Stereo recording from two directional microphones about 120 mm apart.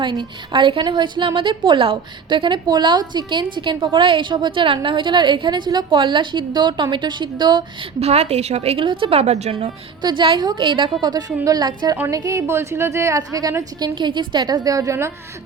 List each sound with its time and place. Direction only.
0.0 s a woman's voice: 40° right (ahead or behind)
7.9 s a woman's voice: 60° right (ahead or behind)
8.8 s a woman's voice: 45° right (ahead or behind); by 9.7 s 65° right (ahead or behind)
10.0 s a woman's voice: 40° right (ahead or behind); by 15.1 s 25° right (ahead or behind)